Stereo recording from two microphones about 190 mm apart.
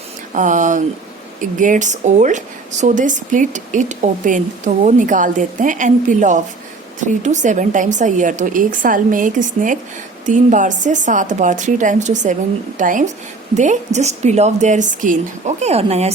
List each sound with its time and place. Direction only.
0.3 s speech: 40° right (ahead or behind)